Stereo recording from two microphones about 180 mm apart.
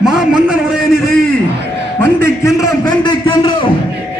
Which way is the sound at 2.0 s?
15° left (ahead or behind).